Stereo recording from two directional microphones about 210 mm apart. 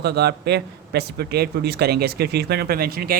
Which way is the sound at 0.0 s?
50° right (ahead or behind).